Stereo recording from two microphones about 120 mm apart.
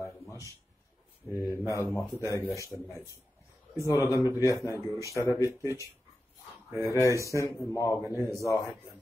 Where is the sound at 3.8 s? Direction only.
25° left (ahead or behind).